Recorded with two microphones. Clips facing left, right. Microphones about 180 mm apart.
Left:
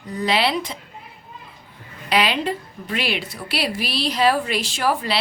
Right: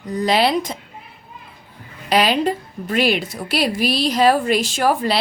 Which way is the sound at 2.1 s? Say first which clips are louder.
Right 4 dB; 40° right (ahead or behind).